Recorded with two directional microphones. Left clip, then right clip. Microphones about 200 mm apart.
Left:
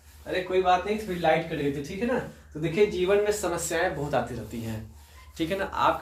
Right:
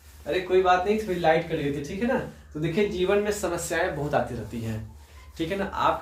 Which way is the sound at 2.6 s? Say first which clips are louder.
Left 1 dB; 20° right (ahead or behind).